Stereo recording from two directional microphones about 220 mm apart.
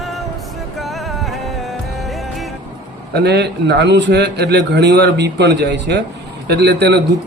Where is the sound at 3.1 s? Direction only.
50° right (ahead or behind).